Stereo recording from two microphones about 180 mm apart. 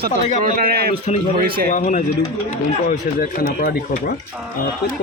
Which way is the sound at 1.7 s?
45° left (ahead or behind).